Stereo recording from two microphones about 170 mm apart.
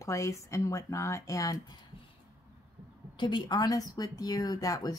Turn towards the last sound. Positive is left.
turn(degrees=20)  # may be behind; listen again after turning